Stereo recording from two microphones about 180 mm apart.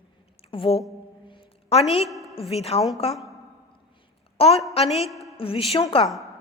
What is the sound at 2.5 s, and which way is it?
Speech, 35° left (ahead or behind).